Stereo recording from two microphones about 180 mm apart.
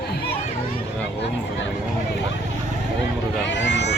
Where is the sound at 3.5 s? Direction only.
80° left.